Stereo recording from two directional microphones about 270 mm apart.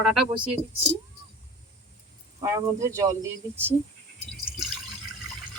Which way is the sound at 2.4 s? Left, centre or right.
Centre.